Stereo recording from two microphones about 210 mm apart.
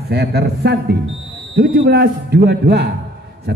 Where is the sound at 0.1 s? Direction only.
50° right (ahead or behind).